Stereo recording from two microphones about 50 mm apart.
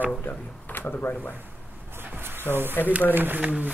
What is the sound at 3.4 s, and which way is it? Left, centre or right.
Speech, right.